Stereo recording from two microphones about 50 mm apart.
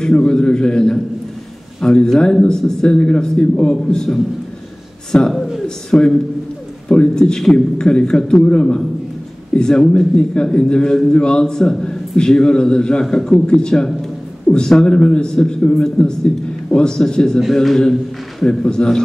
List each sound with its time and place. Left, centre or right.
0.0 s a man's voice: centre
5.3 s a man's voice: centre
5.9 s a man's voice: centre